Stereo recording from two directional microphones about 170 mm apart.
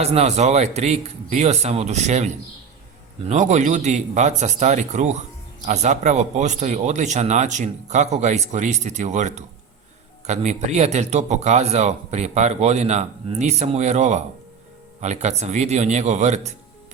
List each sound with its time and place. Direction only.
0.0 s speech: 40° right (ahead or behind)